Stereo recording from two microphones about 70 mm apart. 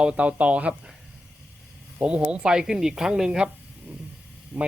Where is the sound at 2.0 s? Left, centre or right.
Centre.